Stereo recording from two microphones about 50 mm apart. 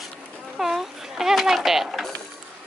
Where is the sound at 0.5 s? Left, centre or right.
Centre.